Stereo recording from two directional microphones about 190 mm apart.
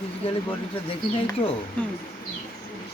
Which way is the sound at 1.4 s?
30° left (ahead or behind).